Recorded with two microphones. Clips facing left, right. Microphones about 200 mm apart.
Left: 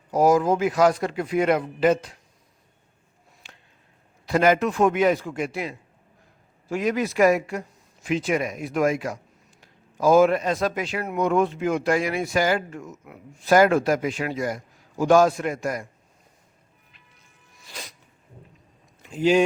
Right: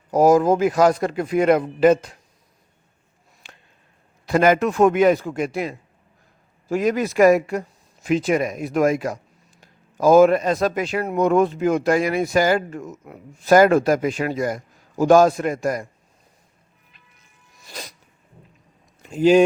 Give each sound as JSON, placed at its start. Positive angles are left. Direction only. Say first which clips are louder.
{"t": 0.1, "sound": "speech", "louder": "right 4 dB", "side_deg": -45}
{"t": 3.4, "sound": "a sound", "louder": "right 3 dB", "side_deg": -50}
{"t": 4.3, "sound": "speech", "louder": "right 3 dB", "side_deg": -50}
{"t": 17.7, "sound": "sneeze", "louder": "right 4 dB", "side_deg": -40}
{"t": 19.0, "sound": "speech", "louder": "right 5 dB", "side_deg": -45}